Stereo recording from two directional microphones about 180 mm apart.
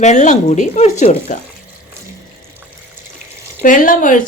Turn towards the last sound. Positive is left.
turn(degrees=45)  # may be behind; listen again after turning